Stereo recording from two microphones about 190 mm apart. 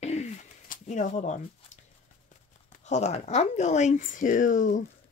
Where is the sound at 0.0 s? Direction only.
35° left (ahead or behind).